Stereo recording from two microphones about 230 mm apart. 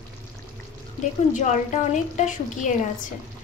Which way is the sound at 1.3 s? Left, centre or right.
Left.